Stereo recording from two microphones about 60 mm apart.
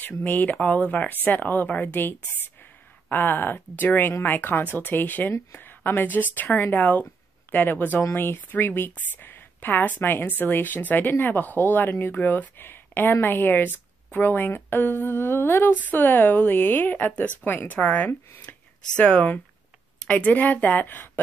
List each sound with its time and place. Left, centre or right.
0.2 s a woman's voice: left